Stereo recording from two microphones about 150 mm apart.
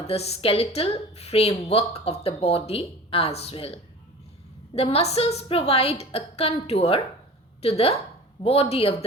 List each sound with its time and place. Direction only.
0.1 s a woman's voice: 45° left (ahead or behind)